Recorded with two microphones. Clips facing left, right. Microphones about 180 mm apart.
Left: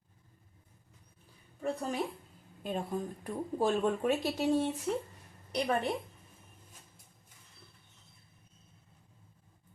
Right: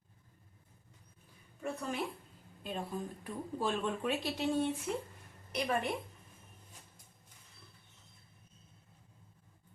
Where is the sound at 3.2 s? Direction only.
45° left (ahead or behind).